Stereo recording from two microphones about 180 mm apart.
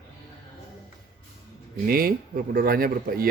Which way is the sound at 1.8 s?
55° right (ahead or behind).